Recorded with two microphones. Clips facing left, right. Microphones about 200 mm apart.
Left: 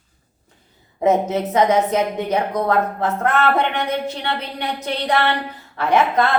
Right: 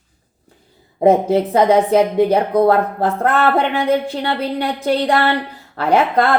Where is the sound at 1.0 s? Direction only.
30° right (ahead or behind).